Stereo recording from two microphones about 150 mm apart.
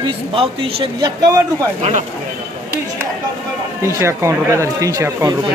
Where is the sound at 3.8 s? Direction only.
20° right (ahead or behind).